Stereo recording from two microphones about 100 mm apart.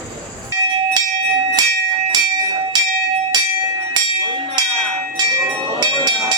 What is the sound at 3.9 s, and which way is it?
Music, 45° right (ahead or behind).